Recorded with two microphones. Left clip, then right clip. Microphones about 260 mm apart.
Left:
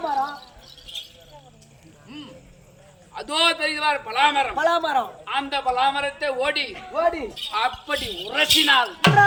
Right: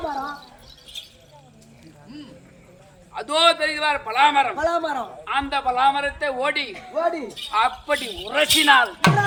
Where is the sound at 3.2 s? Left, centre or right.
Centre.